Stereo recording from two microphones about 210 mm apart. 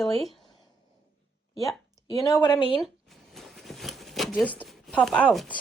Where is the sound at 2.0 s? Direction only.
15° left (ahead or behind).